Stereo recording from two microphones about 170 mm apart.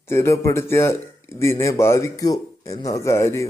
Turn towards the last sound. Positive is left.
turn(degrees=15)  # may be behind; listen again after turning